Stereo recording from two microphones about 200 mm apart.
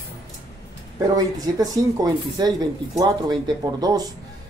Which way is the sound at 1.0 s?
20° right (ahead or behind).